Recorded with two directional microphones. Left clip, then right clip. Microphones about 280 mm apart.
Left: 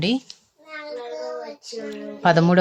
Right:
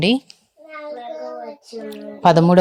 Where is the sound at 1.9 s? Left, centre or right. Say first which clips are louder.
Right 4 dB; centre.